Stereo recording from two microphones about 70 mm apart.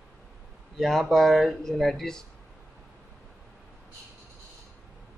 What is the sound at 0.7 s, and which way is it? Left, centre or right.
Speech, centre.